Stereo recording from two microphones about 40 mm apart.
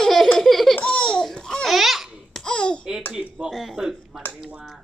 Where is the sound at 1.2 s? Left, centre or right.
Centre.